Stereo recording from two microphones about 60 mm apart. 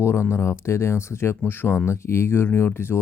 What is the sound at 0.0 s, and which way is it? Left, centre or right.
A man's voice, left.